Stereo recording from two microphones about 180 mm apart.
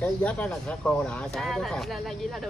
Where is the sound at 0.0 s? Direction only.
5° left (ahead or behind).